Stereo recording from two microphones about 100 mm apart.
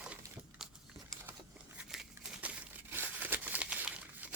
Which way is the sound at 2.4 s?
15° right (ahead or behind).